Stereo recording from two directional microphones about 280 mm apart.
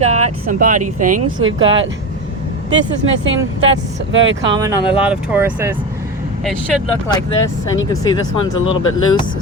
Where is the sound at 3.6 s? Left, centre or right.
Right.